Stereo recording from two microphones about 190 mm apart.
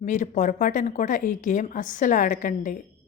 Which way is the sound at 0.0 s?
40° left (ahead or behind).